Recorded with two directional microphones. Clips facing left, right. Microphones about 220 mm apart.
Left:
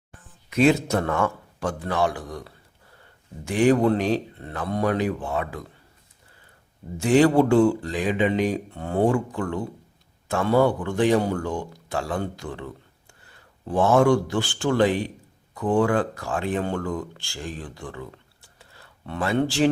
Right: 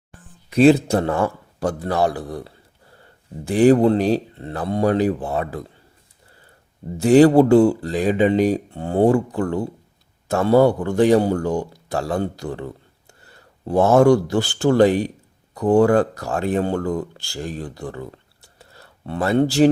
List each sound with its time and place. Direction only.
0.5 s speech: 30° right (ahead or behind)
6.9 s a man's voice: 35° right (ahead or behind)
18.6 s a sound: 40° right (ahead or behind)